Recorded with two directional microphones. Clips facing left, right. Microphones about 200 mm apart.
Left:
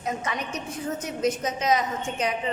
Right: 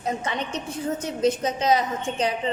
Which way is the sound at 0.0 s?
30° right (ahead or behind).